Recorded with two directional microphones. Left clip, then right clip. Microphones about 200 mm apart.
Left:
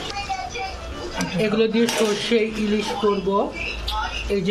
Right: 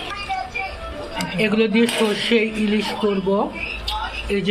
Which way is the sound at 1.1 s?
Centre (ahead or behind).